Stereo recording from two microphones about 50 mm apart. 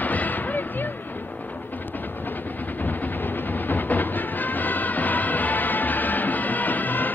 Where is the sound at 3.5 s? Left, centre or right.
Left.